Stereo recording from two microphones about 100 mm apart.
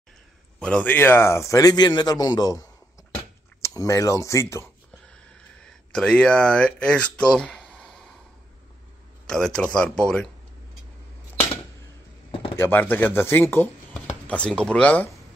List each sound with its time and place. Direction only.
0.6 s speech: 10° left (ahead or behind); by 2.6 s 40° left (ahead or behind)
3.7 s speech: 30° left (ahead or behind)
5.0 s speech: 10° left (ahead or behind)
7.7 s a sound: 5° left (ahead or behind)
9.3 s speech: 5° left (ahead or behind)
12.5 s speech: 20° left (ahead or behind)